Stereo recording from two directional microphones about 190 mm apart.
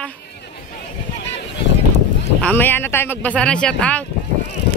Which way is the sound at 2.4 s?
10° left (ahead or behind).